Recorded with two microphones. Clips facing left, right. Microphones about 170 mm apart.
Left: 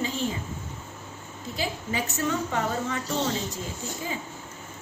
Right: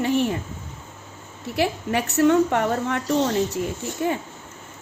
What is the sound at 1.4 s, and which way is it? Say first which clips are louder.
A woman's voice: right 8 dB; 65° right (ahead or behind).